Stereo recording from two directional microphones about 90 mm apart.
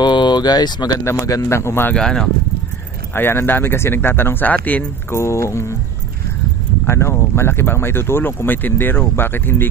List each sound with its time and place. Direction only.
0.0 s speech: 55° left (ahead or behind)
1.2 s speech: 40° left (ahead or behind)
2.0 s speech: 5° left (ahead or behind)
3.2 s speech: 25° left (ahead or behind)
5.1 s speech: 30° left (ahead or behind)
6.9 s speech: 30° left (ahead or behind)